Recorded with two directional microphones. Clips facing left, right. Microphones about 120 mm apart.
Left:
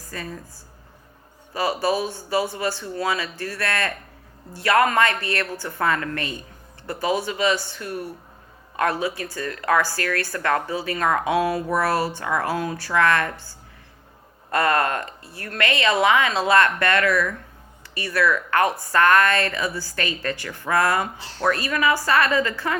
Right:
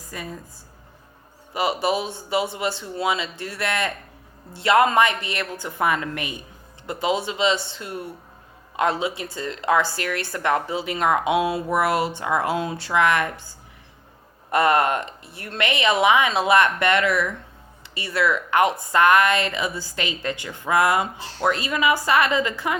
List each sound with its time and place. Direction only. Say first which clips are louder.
0.0 s speech: left 1 dB; 15° right (ahead or behind)
1.5 s speech: even; 20° right (ahead or behind)
14.5 s a woman's voice: right 2 dB; 20° right (ahead or behind)